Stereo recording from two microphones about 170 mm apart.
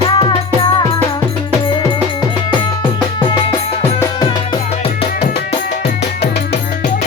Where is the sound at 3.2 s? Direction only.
30° left (ahead or behind).